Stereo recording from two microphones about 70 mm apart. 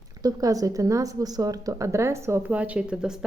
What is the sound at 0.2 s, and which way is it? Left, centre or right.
A woman's voice, right.